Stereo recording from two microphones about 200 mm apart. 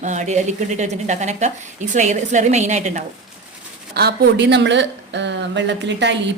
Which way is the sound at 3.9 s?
55° right (ahead or behind).